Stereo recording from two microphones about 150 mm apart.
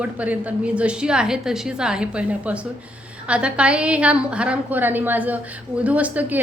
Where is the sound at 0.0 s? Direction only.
10° right (ahead or behind).